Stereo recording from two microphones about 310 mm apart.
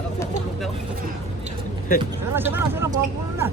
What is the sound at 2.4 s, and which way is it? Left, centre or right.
Speech, centre.